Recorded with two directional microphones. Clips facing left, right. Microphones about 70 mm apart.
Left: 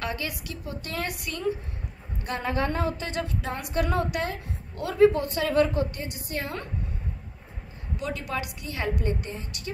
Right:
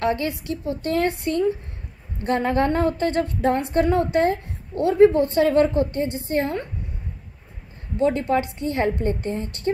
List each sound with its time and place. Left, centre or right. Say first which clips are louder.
0.0 s a woman's voice: right 9 dB; right
8.0 s a woman's voice: right 12 dB; right